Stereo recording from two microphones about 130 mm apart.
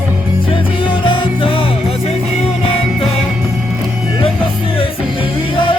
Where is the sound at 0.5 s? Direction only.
40° left (ahead or behind).